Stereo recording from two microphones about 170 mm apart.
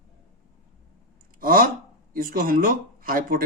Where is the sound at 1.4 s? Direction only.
55° right (ahead or behind).